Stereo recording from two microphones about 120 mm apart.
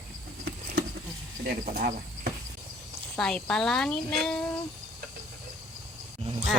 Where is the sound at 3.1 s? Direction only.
5° left (ahead or behind).